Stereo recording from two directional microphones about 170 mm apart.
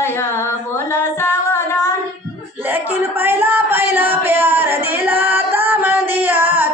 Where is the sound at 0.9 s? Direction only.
15° left (ahead or behind).